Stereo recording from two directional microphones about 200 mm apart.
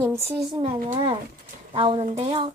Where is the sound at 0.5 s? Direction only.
25° right (ahead or behind).